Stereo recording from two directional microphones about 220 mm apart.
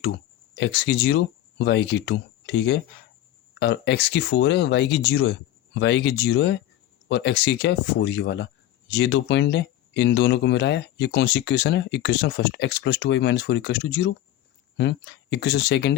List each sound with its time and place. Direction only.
0.5 s speech: 50° left (ahead or behind)